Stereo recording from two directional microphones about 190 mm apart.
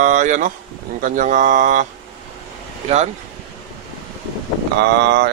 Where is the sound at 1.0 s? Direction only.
40° right (ahead or behind).